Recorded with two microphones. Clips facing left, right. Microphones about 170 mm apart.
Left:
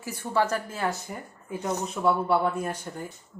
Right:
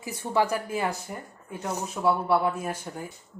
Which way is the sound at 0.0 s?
20° right (ahead or behind).